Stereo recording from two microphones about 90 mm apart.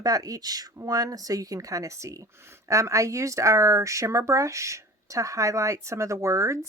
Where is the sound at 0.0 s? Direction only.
40° right (ahead or behind).